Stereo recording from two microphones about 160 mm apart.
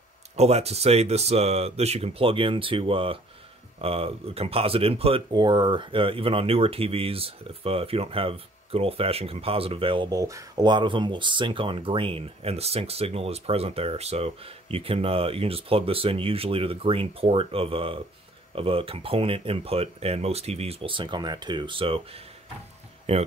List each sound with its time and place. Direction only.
0.4 s speech: 40° right (ahead or behind)
5.3 s speech: 25° right (ahead or behind)